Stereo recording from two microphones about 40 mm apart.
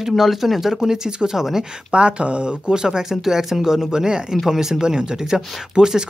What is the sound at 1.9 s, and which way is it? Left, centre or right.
Speech, right.